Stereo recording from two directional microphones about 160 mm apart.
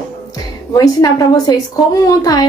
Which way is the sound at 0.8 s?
20° left (ahead or behind).